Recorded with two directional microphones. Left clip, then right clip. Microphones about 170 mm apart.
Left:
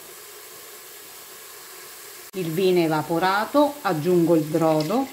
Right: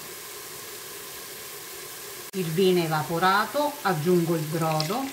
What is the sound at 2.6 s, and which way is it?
Speech, 40° left (ahead or behind).